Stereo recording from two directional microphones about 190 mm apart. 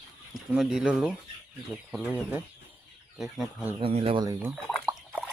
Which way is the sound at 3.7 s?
30° right (ahead or behind).